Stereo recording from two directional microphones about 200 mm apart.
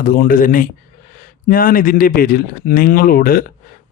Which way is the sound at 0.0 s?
45° left (ahead or behind).